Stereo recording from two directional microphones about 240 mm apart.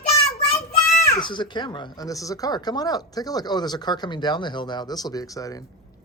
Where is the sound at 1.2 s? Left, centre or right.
Centre.